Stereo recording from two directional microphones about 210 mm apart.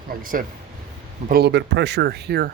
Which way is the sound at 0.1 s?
40° right (ahead or behind).